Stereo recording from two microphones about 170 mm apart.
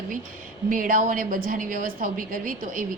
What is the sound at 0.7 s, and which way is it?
A woman's voice, 55° right (ahead or behind).